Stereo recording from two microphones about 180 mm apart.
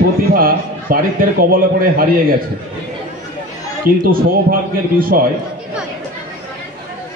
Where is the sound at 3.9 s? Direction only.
50° right (ahead or behind).